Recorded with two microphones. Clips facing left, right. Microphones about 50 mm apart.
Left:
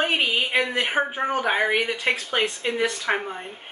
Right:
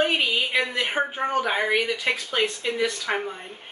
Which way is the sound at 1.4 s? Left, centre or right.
Centre.